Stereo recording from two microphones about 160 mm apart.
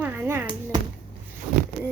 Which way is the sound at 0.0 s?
10° right (ahead or behind).